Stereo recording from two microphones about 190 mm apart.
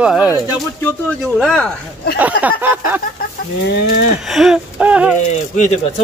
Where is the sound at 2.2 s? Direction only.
10° right (ahead or behind).